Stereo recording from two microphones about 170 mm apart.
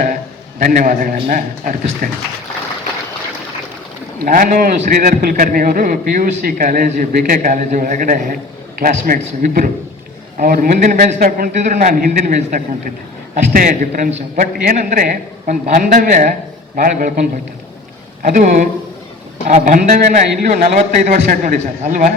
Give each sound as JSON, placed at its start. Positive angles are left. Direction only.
{"t": 0.6, "sound": "a man's voice", "side_deg": -55}
{"t": 4.2, "sound": "a man's voice", "side_deg": -55}